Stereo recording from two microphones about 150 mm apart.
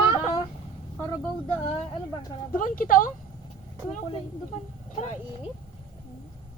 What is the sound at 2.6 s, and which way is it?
Speech, 65° left (ahead or behind).